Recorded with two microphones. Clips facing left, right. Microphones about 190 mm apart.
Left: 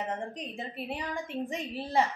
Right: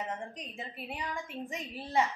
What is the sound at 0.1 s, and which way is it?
A woman's voice, 30° left (ahead or behind).